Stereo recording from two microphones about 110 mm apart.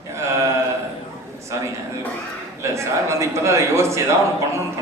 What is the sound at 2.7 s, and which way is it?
A man's voice, 25° right (ahead or behind).